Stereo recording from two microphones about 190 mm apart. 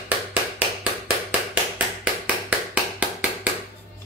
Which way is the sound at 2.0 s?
5° right (ahead or behind).